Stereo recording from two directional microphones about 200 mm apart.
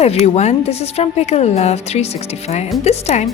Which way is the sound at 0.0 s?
35° left (ahead or behind).